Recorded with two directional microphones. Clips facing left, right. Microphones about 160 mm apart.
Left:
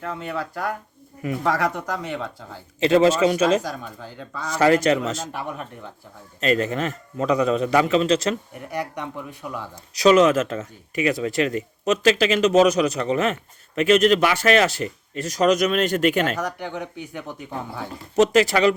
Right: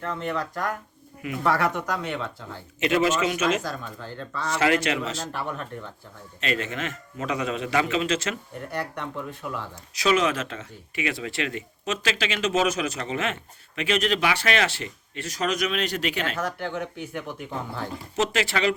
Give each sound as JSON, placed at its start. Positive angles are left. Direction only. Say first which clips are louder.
{"t": 0.1, "sound": "speech", "louder": "right 1 dB", "side_deg": 10}
{"t": 2.8, "sound": "speech", "louder": "left 6 dB", "side_deg": 30}
{"t": 3.6, "sound": "speech", "louder": "left 1 dB", "side_deg": 15}
{"t": 4.5, "sound": "speech", "louder": "left 6 dB", "side_deg": 40}
{"t": 5.3, "sound": "speech", "louder": "left 1 dB", "side_deg": 10}
{"t": 6.4, "sound": "speech", "louder": "left 7 dB", "side_deg": 40}
{"t": 8.7, "sound": "speech", "louder": "left 3 dB", "side_deg": 15}
{"t": 9.9, "sound": "speech", "louder": "left 8 dB", "side_deg": 40}
{"t": 16.4, "sound": "speech", "louder": "left 1 dB", "side_deg": 15}
{"t": 18.2, "sound": "speech", "louder": "left 8 dB", "side_deg": 40}